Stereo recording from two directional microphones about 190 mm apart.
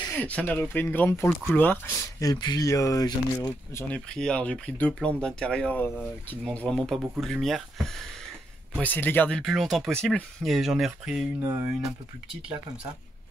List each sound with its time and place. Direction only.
0.1 s speech: 10° left (ahead or behind)
3.9 s speech: 5° left (ahead or behind)